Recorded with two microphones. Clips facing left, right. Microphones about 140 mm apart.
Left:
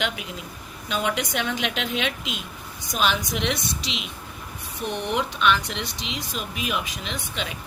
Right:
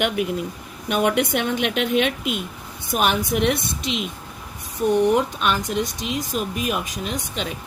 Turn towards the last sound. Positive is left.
turn(degrees=-45)  # may be behind; listen again after turning